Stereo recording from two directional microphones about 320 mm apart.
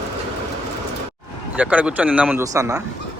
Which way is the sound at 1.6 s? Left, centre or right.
Centre.